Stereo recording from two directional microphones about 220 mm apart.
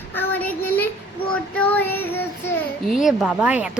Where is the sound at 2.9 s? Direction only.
Centre (ahead or behind).